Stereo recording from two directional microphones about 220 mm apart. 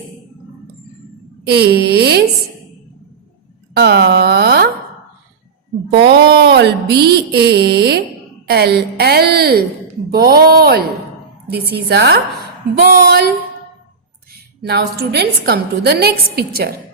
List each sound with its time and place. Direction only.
1.5 s a woman's voice: 45° right (ahead or behind)
3.8 s speech: 50° right (ahead or behind)
6.1 s a woman's voice: 45° right (ahead or behind)
14.3 s a woman's voice: 45° right (ahead or behind)